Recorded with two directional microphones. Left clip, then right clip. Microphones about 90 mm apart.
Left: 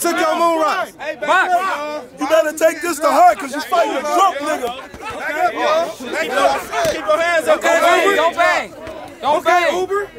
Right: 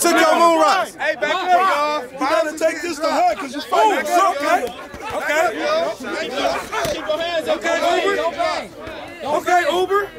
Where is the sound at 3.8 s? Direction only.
35° right (ahead or behind).